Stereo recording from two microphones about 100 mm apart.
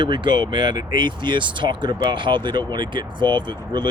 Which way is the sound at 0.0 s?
50° right (ahead or behind).